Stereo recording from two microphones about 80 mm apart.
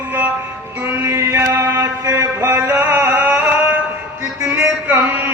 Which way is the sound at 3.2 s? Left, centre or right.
Centre.